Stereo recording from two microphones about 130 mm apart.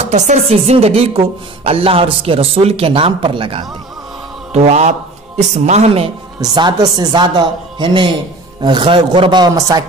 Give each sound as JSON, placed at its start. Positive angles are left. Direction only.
{"t": 0.0, "sound": "a woman's voice", "side_deg": -60}
{"t": 4.5, "sound": "a woman's voice", "side_deg": -55}
{"t": 6.4, "sound": "a man's voice", "side_deg": -30}